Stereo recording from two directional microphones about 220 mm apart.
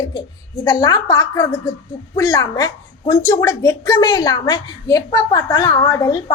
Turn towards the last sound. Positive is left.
turn(degrees=15)  # may be behind; listen again after turning